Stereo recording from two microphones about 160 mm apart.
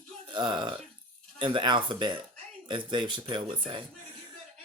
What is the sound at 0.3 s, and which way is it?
Speech, 30° right (ahead or behind).